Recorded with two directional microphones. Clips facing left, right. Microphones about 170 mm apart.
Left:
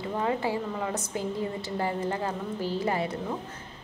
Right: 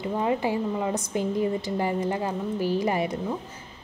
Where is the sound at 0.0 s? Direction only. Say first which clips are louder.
Right 3 dB; 20° right (ahead or behind).